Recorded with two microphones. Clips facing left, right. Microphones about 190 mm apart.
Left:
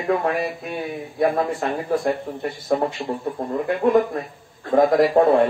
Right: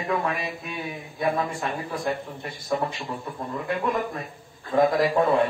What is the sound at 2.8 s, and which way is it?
A man's voice, 35° left (ahead or behind).